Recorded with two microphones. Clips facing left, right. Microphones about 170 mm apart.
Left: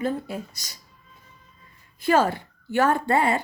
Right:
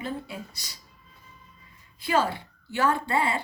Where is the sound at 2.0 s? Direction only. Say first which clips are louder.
Left 5 dB; 50° left (ahead or behind).